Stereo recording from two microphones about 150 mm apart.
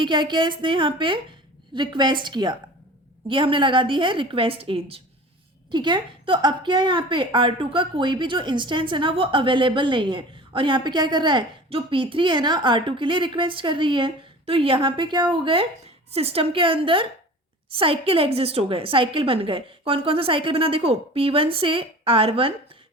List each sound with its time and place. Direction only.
0.0 s a woman's voice: 30° right (ahead or behind)